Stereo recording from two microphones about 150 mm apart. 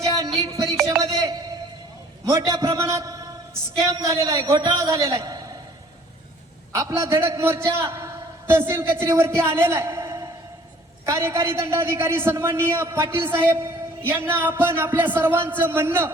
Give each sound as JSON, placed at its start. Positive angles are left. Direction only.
{"t": 0.0, "sound": "music", "side_deg": -25}
{"t": 1.0, "sound": "a sound", "side_deg": -25}
{"t": 2.2, "sound": "a man's voice", "side_deg": -25}
{"t": 6.7, "sound": "a man's voice", "side_deg": -20}